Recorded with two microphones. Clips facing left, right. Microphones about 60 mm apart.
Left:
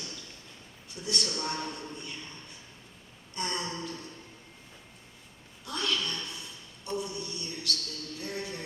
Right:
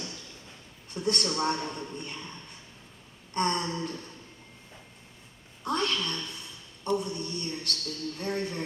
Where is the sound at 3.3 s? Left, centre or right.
Right.